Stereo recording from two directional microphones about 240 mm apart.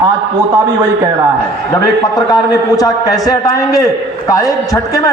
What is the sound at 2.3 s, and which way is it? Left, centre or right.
A man's voice, centre.